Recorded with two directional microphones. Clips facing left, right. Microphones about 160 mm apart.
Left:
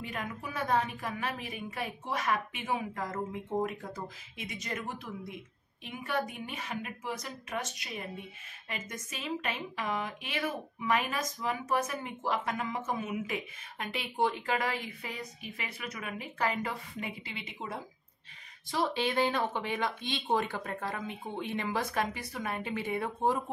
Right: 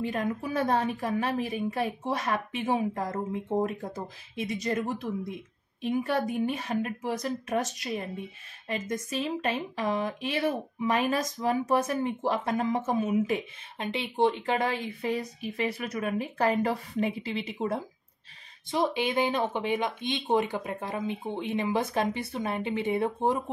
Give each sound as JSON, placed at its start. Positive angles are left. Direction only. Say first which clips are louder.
{"t": 0.0, "sound": "speech", "louder": "right 9 dB", "side_deg": -35}
{"t": 18.7, "sound": "speech", "louder": "right 4 dB", "side_deg": -20}